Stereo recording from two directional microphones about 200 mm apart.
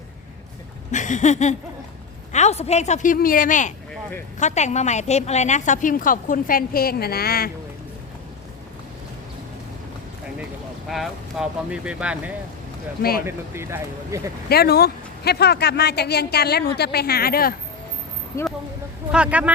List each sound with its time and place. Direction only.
0.9 s a sound: 35° left (ahead or behind)
2.3 s a woman's voice: 35° left (ahead or behind); by 7.5 s 50° left (ahead or behind)
10.8 s speech: centre (ahead or behind)
13.0 s speech: 50° left (ahead or behind)
13.2 s speech: 10° right (ahead or behind)
14.5 s speech: 50° left (ahead or behind)
19.1 s speech: 5° right (ahead or behind)